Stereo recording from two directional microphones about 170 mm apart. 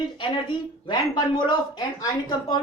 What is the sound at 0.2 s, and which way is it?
Speech, 30° left (ahead or behind).